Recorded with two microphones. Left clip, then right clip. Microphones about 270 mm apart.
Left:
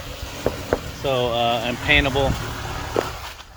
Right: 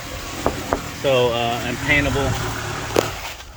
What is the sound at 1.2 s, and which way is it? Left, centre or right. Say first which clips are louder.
Speech: right 1 dB; centre.